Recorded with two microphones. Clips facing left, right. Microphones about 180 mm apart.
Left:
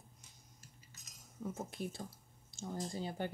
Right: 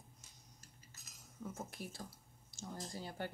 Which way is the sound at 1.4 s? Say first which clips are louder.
Left 5 dB; 20° left (ahead or behind).